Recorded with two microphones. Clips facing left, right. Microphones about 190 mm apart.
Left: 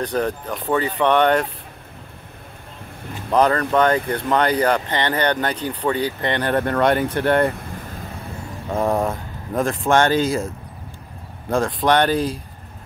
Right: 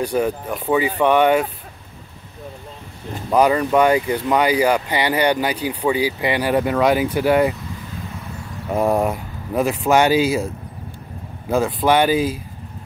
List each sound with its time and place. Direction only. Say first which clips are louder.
0.0 s speech: right 2 dB; 10° right (ahead or behind)
3.3 s speech: right 2 dB; 10° right (ahead or behind)
7.5 s vehicle: even; 55° left (ahead or behind)
8.6 s speech: right 2 dB; 10° right (ahead or behind)